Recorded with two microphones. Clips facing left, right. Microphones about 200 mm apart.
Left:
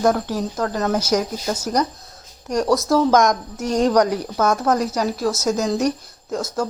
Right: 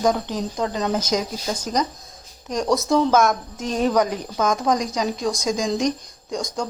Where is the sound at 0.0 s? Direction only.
10° left (ahead or behind).